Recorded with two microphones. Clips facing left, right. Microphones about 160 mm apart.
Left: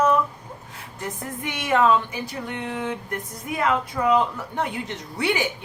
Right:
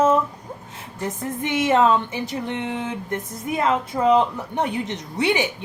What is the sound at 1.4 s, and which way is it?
A woman's voice, 25° right (ahead or behind).